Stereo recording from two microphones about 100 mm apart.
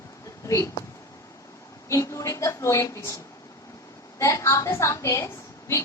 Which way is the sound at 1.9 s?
30° left (ahead or behind).